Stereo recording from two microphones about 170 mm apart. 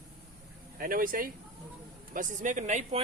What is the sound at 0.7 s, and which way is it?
Speech, 60° right (ahead or behind).